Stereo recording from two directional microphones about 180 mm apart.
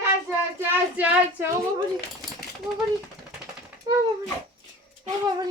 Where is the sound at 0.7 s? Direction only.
10° right (ahead or behind).